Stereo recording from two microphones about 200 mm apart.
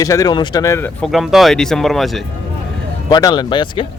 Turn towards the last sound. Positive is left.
turn(degrees=25)  # may be behind; listen again after turning